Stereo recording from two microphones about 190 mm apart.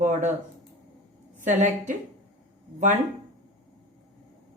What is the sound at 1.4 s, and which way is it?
Speech, 40° right (ahead or behind).